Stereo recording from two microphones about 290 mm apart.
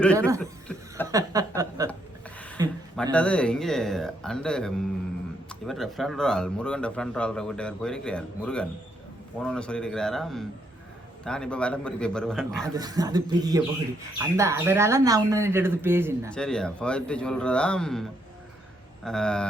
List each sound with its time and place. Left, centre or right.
0.0 s speech: centre
0.3 s chuckle: centre
1.1 s a sound: centre
2.9 s speech: centre
12.7 s speech: centre
16.3 s speech: centre